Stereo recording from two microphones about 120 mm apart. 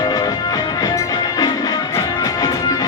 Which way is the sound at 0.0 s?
30° left (ahead or behind).